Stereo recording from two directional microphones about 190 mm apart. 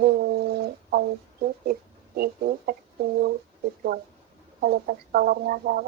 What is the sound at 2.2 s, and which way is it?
Speech, 55° right (ahead or behind).